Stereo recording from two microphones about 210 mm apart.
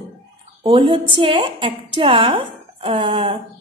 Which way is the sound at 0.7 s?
25° right (ahead or behind).